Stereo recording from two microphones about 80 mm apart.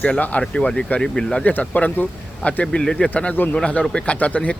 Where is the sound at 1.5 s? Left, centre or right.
Centre.